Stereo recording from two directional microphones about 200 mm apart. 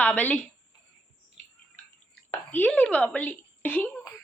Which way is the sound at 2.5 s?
10° left (ahead or behind).